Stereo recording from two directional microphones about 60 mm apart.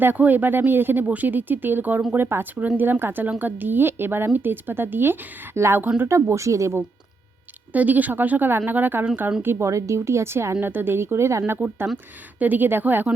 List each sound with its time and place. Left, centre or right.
0.0 s speech: right
5.5 s a woman's voice: right
7.7 s speech: right
9.6 s a woman's voice: right
10.6 s a woman's voice: right
11.4 s speech: right